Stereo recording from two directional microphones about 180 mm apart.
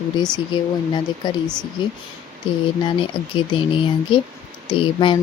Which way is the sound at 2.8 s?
25° left (ahead or behind).